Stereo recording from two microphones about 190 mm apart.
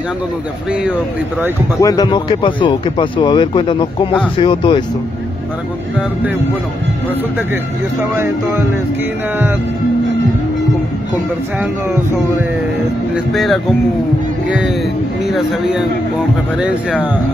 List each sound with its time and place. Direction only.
1.8 s speech: 20° left (ahead or behind)
8.0 s speech: 10° right (ahead or behind)
13.1 s speech: centre (ahead or behind)
15.2 s speech: centre (ahead or behind)